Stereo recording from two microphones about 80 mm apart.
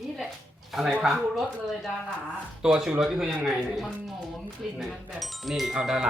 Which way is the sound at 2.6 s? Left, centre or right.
Centre.